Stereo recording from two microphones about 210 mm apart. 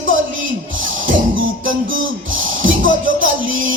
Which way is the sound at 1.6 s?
70° right (ahead or behind).